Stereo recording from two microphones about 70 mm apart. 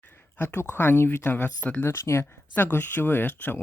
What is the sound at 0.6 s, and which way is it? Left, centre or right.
Speech, left.